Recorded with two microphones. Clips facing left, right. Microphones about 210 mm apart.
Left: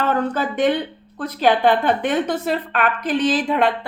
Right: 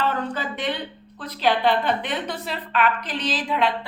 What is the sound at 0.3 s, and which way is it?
A woman's voice, 50° left (ahead or behind).